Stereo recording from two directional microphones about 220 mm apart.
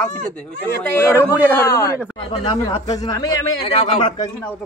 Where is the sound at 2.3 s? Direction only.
20° left (ahead or behind).